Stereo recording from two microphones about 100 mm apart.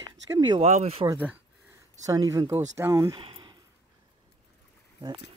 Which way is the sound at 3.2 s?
55° right (ahead or behind).